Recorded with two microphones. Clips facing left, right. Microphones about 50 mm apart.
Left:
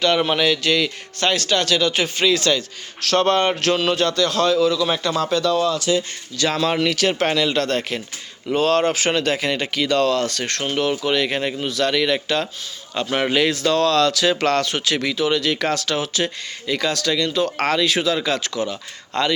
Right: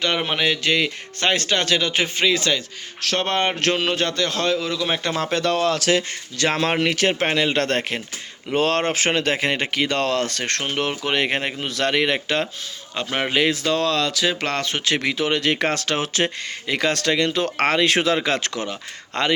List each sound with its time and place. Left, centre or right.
0.0 s speech: centre
5.3 s speech: right
6.3 s speech: right
7.6 s speech: right
12.9 s speech: centre
14.6 s speech: right